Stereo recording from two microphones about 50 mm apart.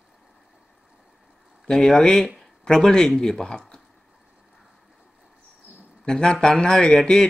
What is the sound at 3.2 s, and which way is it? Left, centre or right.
Speech, centre.